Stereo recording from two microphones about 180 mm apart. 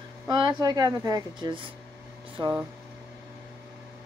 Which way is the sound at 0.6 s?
20° right (ahead or behind).